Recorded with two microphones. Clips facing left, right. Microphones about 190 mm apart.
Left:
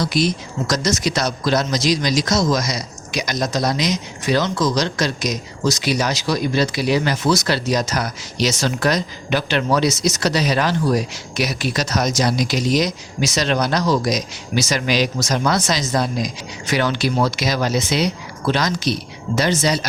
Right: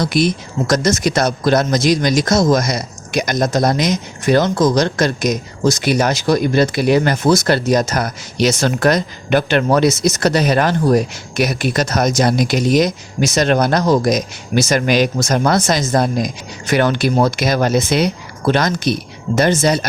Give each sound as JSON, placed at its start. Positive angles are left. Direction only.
{"t": 0.0, "sound": "speech", "side_deg": -55}